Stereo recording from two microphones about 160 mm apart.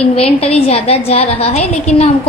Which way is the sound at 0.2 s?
40° left (ahead or behind).